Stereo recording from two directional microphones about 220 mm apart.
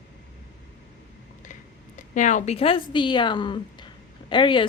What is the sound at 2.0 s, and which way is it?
A woman's voice, 35° left (ahead or behind).